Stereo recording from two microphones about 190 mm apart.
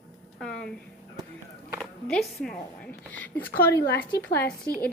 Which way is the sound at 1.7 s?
Centre (ahead or behind).